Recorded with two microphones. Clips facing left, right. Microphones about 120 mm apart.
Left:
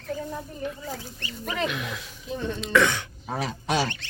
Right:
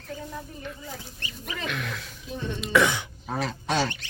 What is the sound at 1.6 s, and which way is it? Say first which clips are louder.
Speech: right 1 dB; centre (ahead or behind).